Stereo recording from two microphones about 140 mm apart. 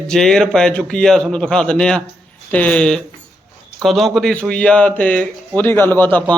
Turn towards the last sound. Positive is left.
turn(degrees=15)  # may be behind; listen again after turning